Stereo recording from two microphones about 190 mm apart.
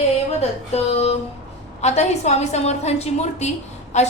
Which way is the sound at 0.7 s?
35° left (ahead or behind).